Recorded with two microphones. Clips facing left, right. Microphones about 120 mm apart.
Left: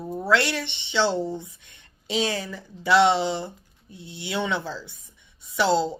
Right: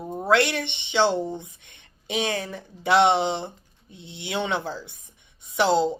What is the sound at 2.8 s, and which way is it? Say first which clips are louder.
Speech: even; 20° right (ahead or behind).